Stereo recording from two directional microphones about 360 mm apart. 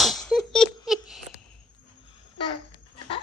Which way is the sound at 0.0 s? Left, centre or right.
Centre.